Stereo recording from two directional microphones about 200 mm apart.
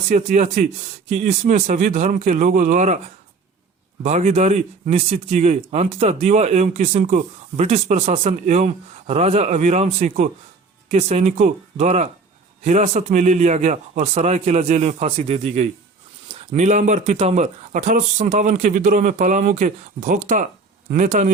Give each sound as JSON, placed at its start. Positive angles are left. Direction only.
{"t": 0.1, "sound": "speech", "side_deg": -35}
{"t": 4.0, "sound": "speech", "side_deg": -35}